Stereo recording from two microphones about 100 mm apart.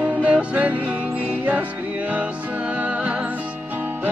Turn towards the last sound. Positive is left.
turn(degrees=-10)  # may be behind; listen again after turning